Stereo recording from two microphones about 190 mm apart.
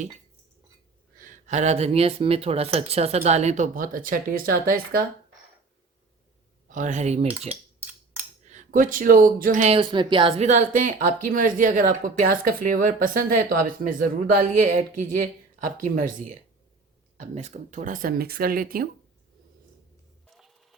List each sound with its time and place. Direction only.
1.2 s speech: 35° right (ahead or behind)
6.7 s speech: 40° right (ahead or behind)
9.7 s speech: 25° right (ahead or behind); by 18.9 s 50° right (ahead or behind)
20.3 s music: centre (ahead or behind)